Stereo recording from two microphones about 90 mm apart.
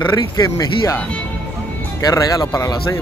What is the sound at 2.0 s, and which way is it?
Speech, 40° left (ahead or behind).